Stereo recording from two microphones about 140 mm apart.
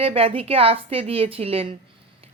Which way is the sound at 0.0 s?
40° right (ahead or behind).